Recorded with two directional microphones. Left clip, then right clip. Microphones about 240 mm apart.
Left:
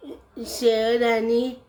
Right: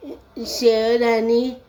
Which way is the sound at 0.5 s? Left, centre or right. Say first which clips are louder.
Right 3 dB; centre.